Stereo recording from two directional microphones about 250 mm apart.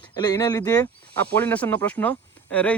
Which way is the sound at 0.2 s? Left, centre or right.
Centre.